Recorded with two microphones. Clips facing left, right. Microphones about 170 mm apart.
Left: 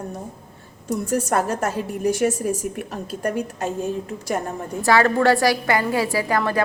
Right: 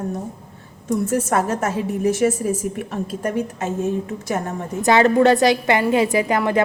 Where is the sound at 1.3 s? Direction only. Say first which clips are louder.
Right 1 dB; centre (ahead or behind).